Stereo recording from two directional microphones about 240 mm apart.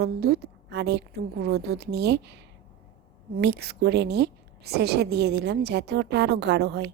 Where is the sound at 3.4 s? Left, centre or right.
Right.